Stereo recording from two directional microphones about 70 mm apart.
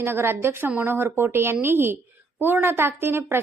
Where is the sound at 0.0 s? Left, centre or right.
Right.